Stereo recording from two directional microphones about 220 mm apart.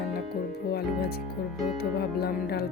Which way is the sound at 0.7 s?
45° left (ahead or behind).